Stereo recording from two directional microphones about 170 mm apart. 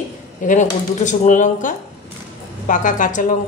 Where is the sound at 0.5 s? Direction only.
45° left (ahead or behind).